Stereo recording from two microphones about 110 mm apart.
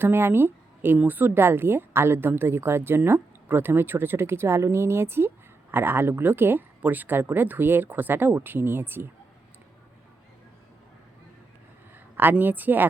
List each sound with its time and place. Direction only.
0.0 s a woman's voice: 20° right (ahead or behind)
12.1 s speech: 15° right (ahead or behind)